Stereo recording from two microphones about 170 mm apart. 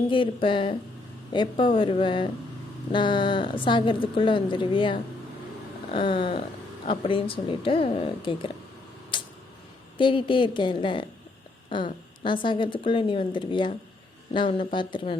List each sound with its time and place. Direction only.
0.1 s a woman's voice: 30° left (ahead or behind)
9.1 s a sound: 30° left (ahead or behind)
10.0 s a woman's voice: 30° left (ahead or behind)